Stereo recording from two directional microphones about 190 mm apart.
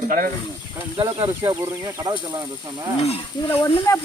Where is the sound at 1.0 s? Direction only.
25° right (ahead or behind).